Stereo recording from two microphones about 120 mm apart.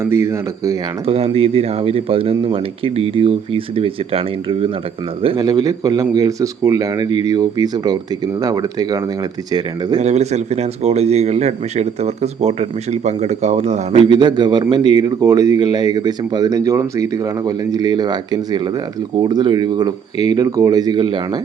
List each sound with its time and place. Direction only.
0.0 s speech: 25° right (ahead or behind)
1.0 s speech: 55° right (ahead or behind)
5.4 s speech: 30° right (ahead or behind)
10.0 s speech: 65° right (ahead or behind)
14.1 s speech: 40° right (ahead or behind)